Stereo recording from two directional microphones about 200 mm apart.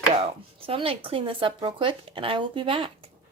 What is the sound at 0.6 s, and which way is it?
Speech, 30° right (ahead or behind).